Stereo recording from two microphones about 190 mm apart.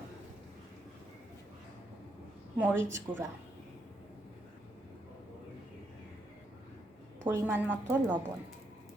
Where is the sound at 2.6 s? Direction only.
10° right (ahead or behind).